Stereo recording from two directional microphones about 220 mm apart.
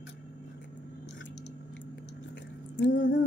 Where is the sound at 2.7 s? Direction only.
55° left (ahead or behind).